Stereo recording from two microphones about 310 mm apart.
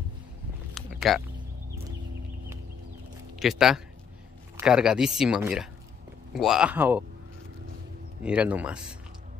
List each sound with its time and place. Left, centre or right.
0.7 s a sound: centre
3.3 s speech: centre
8.2 s speech: centre